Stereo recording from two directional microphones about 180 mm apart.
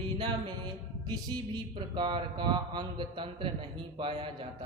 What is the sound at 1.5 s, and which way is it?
A man's voice, 25° right (ahead or behind).